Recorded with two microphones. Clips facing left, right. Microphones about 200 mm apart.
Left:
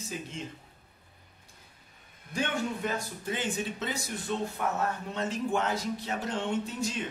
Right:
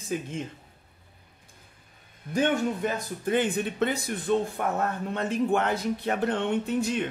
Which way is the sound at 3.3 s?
55° right (ahead or behind).